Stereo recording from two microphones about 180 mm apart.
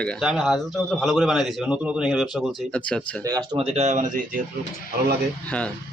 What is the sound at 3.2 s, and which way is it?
Speech, 20° right (ahead or behind).